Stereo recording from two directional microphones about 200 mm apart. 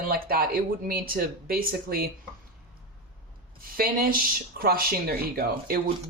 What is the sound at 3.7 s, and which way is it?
Speech, 45° right (ahead or behind).